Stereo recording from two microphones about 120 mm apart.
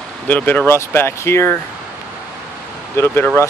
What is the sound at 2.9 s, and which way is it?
Speech, 20° left (ahead or behind).